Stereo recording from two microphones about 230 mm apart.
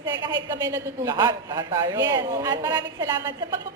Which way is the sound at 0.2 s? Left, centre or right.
Centre.